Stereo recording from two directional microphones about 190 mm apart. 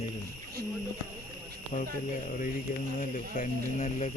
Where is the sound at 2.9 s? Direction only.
45° left (ahead or behind).